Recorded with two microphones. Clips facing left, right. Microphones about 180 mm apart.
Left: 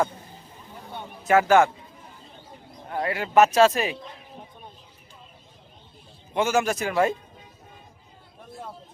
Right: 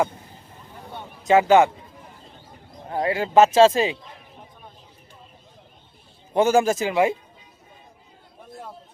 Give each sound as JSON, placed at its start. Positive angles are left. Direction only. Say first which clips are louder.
{"t": 1.3, "sound": "speech", "louder": "right 2 dB", "side_deg": -20}
{"t": 2.9, "sound": "speech", "louder": "right 3 dB", "side_deg": -25}
{"t": 6.3, "sound": "speech", "louder": "right 5 dB", "side_deg": -35}